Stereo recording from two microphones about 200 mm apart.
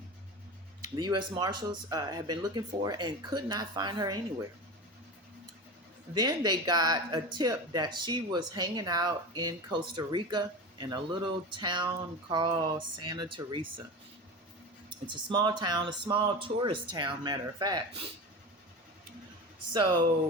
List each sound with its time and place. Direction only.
0.9 s speech: 20° right (ahead or behind)
6.1 s speech: 20° right (ahead or behind)
14.8 s speech: 25° right (ahead or behind)
19.7 s speech: 20° right (ahead or behind)